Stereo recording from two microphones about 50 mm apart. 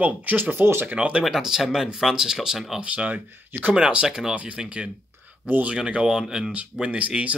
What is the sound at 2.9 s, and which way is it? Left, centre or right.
Speech, right.